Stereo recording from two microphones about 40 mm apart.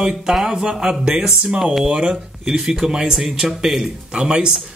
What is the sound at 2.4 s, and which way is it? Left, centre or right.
Speech, centre.